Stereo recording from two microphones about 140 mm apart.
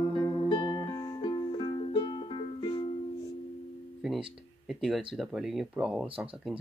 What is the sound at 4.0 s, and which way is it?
Speech, 5° right (ahead or behind).